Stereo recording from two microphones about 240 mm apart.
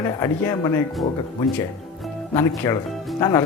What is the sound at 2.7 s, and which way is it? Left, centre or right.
Speech, centre.